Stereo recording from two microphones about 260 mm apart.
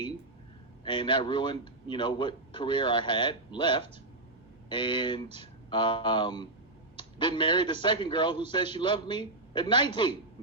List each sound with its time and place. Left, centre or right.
0.9 s a man's voice: centre